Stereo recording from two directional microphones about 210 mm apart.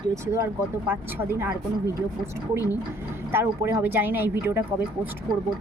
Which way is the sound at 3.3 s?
10° right (ahead or behind).